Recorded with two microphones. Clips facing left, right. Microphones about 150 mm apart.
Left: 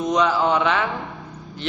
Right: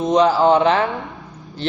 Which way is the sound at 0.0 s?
30° right (ahead or behind).